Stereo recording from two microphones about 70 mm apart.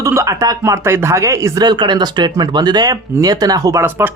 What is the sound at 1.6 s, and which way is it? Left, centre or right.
Speech, right.